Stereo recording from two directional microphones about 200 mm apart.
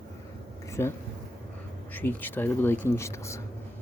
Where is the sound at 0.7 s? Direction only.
15° left (ahead or behind).